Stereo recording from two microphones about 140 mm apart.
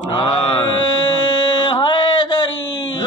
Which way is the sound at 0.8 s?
30° left (ahead or behind).